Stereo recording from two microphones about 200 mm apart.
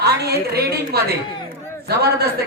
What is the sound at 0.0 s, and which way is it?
A woman's voice, 55° right (ahead or behind).